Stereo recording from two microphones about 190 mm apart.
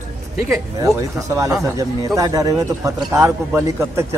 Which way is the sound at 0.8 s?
15° right (ahead or behind).